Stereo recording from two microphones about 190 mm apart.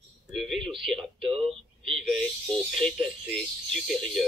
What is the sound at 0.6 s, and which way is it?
Speech, 25° right (ahead or behind).